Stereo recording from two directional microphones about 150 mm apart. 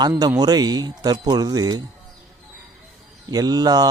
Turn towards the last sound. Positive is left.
turn(degrees=-25)  # may be behind; listen again after turning